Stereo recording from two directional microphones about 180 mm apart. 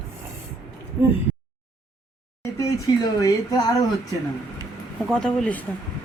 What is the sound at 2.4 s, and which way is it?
Speech, 20° left (ahead or behind).